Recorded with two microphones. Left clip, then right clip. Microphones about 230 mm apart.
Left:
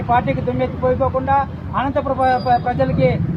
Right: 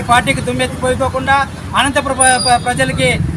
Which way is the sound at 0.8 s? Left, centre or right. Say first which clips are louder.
Right 3 dB; right.